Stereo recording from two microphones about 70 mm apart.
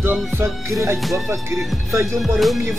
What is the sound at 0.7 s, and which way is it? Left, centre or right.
Music, right.